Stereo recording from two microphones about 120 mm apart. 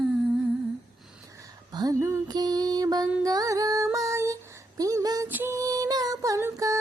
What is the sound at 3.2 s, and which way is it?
Music, 30° right (ahead or behind).